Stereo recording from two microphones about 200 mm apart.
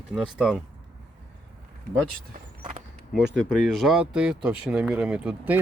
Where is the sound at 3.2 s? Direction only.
60° right (ahead or behind).